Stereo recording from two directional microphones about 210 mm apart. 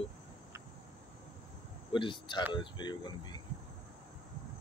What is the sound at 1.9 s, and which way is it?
Speech, 25° left (ahead or behind).